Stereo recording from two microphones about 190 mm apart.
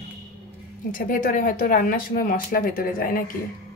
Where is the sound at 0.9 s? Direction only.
45° left (ahead or behind).